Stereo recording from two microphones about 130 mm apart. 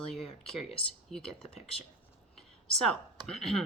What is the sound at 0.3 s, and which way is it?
Speech, 45° left (ahead or behind).